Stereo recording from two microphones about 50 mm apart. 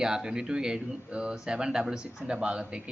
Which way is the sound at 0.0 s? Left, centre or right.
Centre.